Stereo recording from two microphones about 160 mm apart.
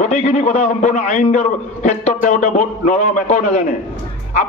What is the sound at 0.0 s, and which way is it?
A man's voice, 45° left (ahead or behind).